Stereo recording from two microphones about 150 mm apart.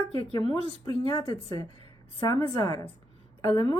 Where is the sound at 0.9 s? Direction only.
35° left (ahead or behind).